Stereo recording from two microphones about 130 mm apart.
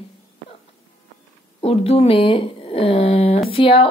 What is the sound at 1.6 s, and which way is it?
A woman's voice, 50° left (ahead or behind).